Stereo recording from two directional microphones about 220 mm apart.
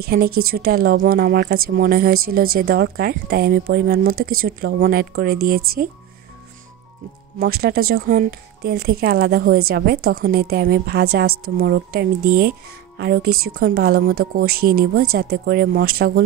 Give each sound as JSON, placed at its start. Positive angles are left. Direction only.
{"t": 0.0, "sound": "a woman's voice", "side_deg": -45}
{"t": 7.3, "sound": "a woman's voice", "side_deg": -45}